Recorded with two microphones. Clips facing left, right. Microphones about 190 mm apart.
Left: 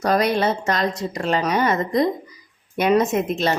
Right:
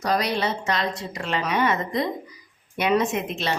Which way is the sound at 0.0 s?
50° left (ahead or behind).